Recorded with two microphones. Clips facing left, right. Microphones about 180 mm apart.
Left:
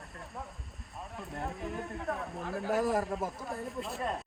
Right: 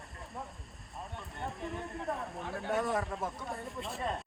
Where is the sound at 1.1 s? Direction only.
Centre (ahead or behind).